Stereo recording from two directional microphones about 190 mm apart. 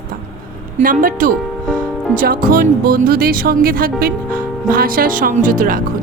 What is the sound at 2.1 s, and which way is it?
Speech, 50° right (ahead or behind).